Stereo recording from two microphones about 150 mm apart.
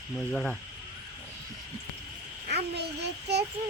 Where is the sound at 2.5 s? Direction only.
90° right.